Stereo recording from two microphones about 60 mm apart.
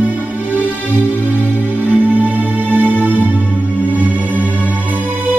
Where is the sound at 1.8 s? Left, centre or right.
Right.